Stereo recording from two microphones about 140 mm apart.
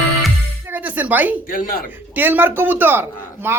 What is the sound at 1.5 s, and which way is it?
Speech, 85° left.